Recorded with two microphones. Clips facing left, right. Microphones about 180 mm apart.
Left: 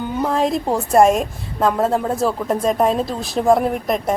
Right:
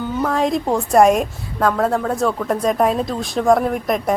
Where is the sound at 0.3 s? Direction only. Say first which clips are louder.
Even; centre (ahead or behind).